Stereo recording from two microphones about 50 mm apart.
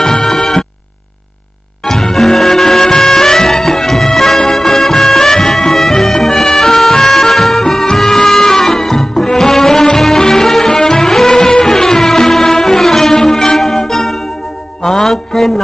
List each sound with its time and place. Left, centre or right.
0.0 s music: centre
1.9 s music: centre
14.8 s a sound: centre